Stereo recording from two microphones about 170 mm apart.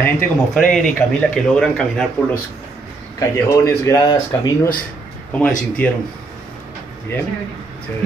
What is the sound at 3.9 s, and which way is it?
Speech, 20° left (ahead or behind).